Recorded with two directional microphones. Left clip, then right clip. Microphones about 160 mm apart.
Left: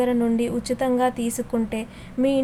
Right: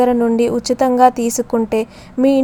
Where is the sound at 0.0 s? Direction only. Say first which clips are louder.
Right 8 dB; 25° right (ahead or behind).